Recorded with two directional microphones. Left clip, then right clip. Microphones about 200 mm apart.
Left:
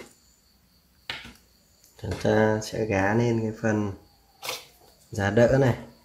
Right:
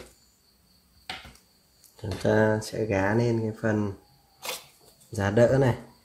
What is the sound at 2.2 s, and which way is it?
Speech, 10° right (ahead or behind).